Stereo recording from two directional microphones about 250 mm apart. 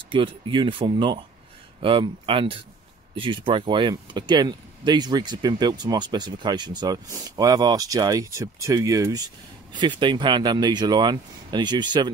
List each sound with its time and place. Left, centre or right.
0.1 s speech: centre